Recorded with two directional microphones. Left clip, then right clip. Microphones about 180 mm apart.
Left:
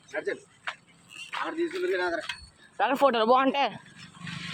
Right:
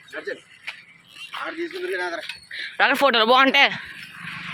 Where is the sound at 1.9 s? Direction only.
40° left (ahead or behind).